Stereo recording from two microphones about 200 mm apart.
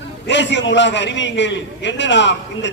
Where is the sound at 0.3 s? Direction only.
65° left (ahead or behind).